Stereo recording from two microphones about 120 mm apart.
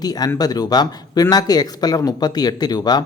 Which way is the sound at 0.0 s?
30° left (ahead or behind).